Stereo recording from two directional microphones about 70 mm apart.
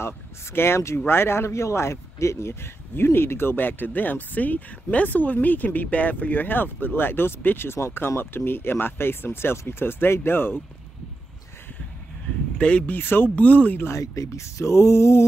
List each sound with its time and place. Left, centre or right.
0.0 s speech: left
12.5 s speech: centre
13.8 s speech: left